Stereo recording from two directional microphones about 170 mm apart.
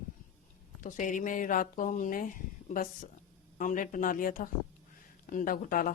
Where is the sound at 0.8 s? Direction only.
50° left (ahead or behind).